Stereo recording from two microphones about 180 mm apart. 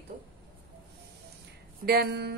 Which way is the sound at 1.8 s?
60° right (ahead or behind).